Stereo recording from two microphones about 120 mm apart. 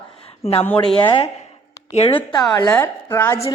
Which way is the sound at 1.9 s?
55° left (ahead or behind).